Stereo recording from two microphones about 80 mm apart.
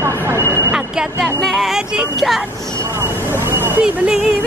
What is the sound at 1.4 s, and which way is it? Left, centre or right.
Music, centre.